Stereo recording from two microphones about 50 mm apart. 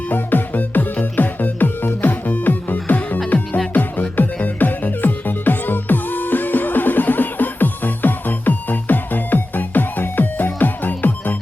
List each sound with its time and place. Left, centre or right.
0.1 s music: left